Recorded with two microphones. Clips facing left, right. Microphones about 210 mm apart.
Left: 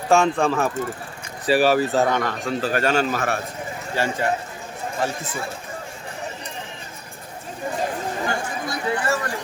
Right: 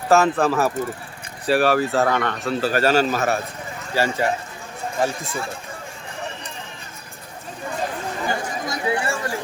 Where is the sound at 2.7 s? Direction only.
35° right (ahead or behind).